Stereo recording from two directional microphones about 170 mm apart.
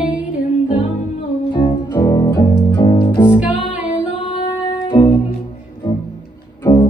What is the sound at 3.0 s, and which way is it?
Music, 30° left (ahead or behind).